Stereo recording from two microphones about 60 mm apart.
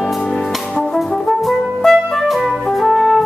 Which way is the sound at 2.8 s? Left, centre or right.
Centre.